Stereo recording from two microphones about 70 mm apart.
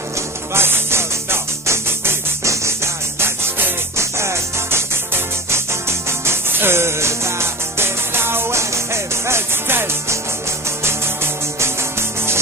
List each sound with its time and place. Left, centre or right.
0.6 s music: right